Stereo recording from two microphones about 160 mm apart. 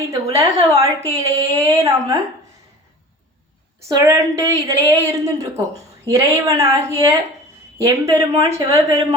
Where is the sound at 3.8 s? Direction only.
20° right (ahead or behind).